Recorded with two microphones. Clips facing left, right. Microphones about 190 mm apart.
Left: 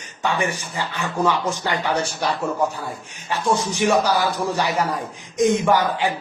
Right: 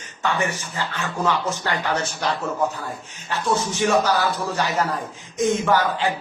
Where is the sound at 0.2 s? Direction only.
15° left (ahead or behind).